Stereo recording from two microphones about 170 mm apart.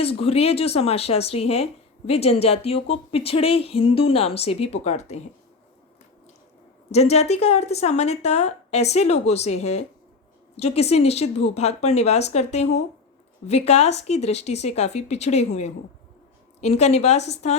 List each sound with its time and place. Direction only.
0.0 s a woman's voice: 35° left (ahead or behind)
6.9 s a woman's voice: 40° left (ahead or behind)
16.6 s a woman's voice: 40° left (ahead or behind)